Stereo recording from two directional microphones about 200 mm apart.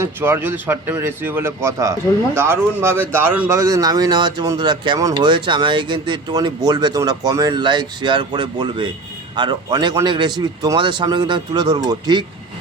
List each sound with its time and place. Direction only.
0.0 s speech: 10° right (ahead or behind)